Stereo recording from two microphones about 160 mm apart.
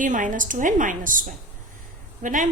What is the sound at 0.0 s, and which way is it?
A woman's voice, 55° right (ahead or behind).